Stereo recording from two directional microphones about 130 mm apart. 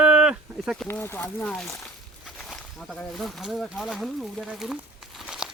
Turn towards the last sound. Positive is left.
turn(degrees=-5)  # may be behind; listen again after turning